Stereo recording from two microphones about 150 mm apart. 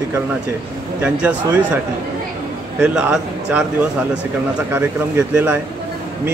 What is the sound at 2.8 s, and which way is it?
A man's voice, 5° right (ahead or behind).